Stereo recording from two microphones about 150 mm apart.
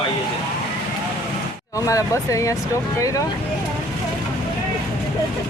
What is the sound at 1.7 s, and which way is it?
Speech, 20° left (ahead or behind).